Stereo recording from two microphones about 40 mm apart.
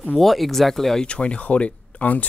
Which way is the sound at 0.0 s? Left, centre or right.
Centre.